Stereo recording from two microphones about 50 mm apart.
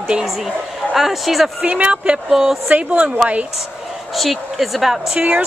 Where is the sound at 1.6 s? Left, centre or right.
Right.